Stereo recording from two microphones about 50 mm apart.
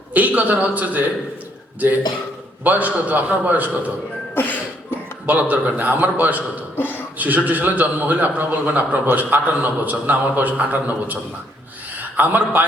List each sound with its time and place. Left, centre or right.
0.1 s a man's voice: right
2.6 s a man's voice: right
4.4 s a sound: left
5.2 s a man's voice: right
6.7 s speech: left
7.2 s a man's voice: right